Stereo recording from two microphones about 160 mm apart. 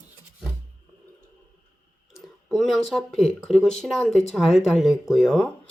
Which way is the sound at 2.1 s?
Centre (ahead or behind).